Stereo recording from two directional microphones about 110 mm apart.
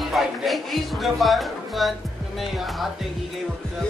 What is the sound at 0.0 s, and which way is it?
Speech, centre (ahead or behind).